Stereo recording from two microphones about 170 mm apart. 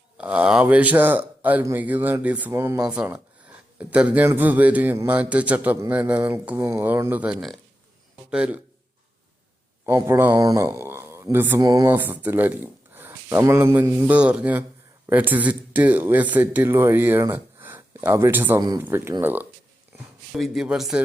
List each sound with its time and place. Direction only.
0.2 s speech: 10° right (ahead or behind)
9.8 s speech: 15° right (ahead or behind)
11.9 s speech: 10° right (ahead or behind)
18.6 s speech: 20° right (ahead or behind); by 21.0 s 5° right (ahead or behind)